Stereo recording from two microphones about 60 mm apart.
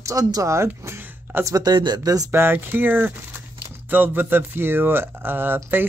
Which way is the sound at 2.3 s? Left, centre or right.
Right.